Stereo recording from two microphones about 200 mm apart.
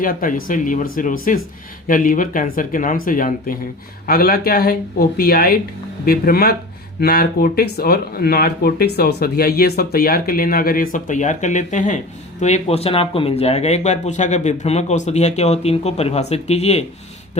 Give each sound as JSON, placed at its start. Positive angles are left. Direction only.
{"t": 0.0, "sound": "speech", "side_deg": 45}